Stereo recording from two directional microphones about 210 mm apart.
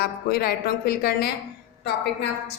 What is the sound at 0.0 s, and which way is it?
A woman's voice, 50° left (ahead or behind).